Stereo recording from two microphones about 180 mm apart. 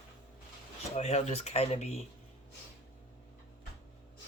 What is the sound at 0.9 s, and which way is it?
Speech, 35° left (ahead or behind).